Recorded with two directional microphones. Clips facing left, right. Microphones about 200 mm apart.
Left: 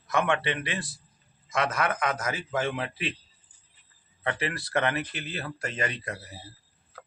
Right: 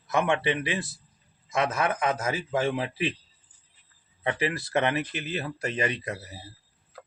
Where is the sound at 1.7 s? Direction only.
25° right (ahead or behind).